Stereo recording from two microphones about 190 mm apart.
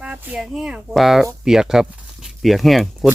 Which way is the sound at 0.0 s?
5° right (ahead or behind).